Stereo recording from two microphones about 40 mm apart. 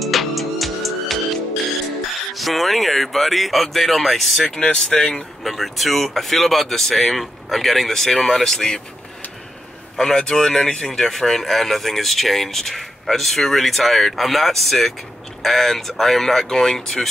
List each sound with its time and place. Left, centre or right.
0.0 s music: centre
2.3 s speech: centre
4.5 s speech: centre
5.4 s speech: centre
9.9 s speech: centre